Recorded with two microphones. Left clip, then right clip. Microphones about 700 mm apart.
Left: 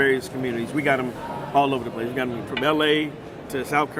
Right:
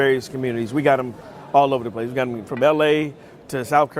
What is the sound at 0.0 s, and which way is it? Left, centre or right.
A man's voice, right.